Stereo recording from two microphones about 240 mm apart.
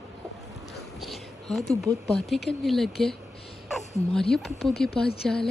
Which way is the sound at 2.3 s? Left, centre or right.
Centre.